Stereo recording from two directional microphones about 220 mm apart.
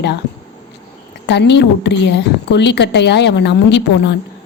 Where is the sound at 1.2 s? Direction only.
50° left (ahead or behind).